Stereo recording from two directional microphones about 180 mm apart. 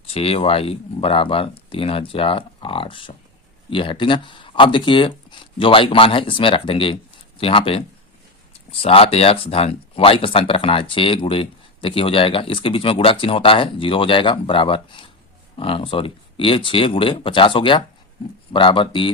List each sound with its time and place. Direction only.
0.1 s speech: 35° left (ahead or behind)